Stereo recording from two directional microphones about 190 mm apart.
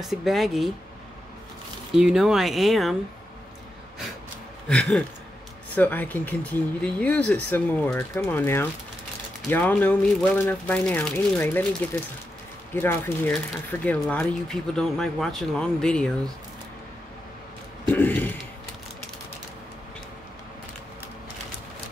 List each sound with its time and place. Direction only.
0.0 s speech: centre (ahead or behind)
2.0 s speech: 5° right (ahead or behind)
4.6 s speech: 5° left (ahead or behind)
17.8 s a sound: 10° left (ahead or behind)